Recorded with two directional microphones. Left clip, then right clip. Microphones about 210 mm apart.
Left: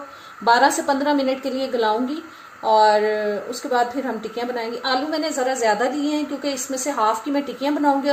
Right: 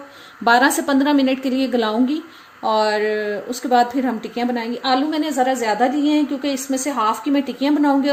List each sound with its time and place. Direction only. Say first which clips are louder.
0.4 s a woman's voice: right 1 dB; 50° right (ahead or behind)